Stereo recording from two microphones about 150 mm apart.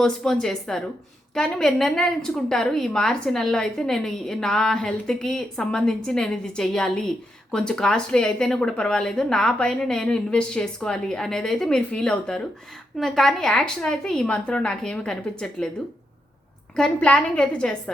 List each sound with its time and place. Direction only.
0.0 s a woman's voice: 5° left (ahead or behind)
16.7 s a woman's voice: 5° left (ahead or behind)